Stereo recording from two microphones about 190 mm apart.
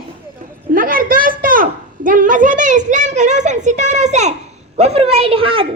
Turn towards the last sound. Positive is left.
turn(degrees=-30)  # may be behind; listen again after turning